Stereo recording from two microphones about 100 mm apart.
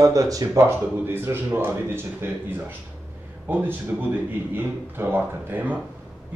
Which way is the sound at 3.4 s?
20° right (ahead or behind).